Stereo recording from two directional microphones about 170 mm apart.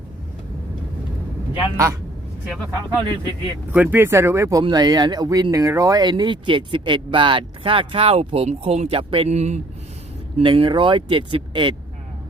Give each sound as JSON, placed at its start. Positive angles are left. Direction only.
{"t": 1.5, "sound": "speech", "side_deg": -15}
{"t": 3.7, "sound": "speech", "side_deg": -10}